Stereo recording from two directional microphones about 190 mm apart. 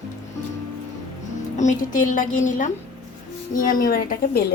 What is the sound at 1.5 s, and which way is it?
A woman's voice, 40° left (ahead or behind).